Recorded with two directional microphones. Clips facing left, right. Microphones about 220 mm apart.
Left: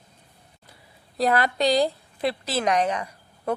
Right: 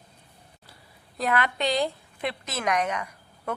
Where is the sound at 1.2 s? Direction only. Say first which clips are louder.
Left 4 dB; 35° left (ahead or behind).